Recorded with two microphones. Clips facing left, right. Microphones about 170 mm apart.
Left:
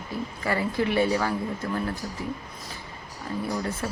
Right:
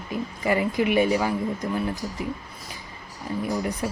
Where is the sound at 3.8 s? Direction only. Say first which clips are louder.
Right 3 dB; 15° right (ahead or behind).